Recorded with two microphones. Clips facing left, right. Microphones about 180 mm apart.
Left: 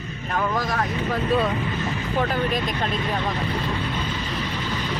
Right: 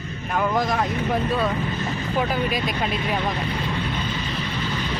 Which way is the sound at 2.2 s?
5° right (ahead or behind).